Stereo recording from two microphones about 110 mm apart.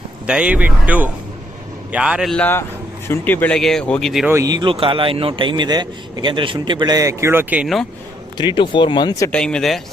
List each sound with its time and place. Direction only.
0.3 s speech: 10° right (ahead or behind)
3.1 s speech: 15° left (ahead or behind)
3.6 s speech: 5° left (ahead or behind)
4.3 s speech: 30° right (ahead or behind)
4.7 s a man's voice: 55° right (ahead or behind); by 7.6 s 20° right (ahead or behind)
8.4 s speech: 45° left (ahead or behind)
9.3 s speech: 10° left (ahead or behind)